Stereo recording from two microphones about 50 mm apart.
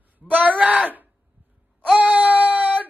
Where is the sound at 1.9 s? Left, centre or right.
Right.